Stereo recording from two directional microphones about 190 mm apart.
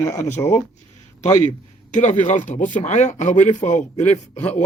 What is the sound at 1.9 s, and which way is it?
Speech, 40° left (ahead or behind).